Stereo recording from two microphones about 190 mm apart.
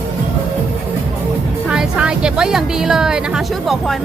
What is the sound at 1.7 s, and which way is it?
Speech, 5° right (ahead or behind).